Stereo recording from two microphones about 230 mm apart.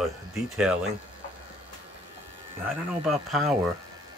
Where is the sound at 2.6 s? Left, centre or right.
Centre.